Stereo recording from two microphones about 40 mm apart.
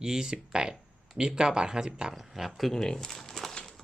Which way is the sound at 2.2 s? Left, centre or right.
Centre.